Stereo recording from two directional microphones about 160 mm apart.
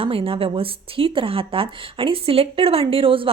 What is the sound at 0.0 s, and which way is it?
Speech, 35° right (ahead or behind).